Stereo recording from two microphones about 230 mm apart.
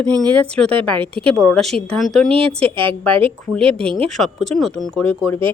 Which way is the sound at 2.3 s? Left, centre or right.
Right.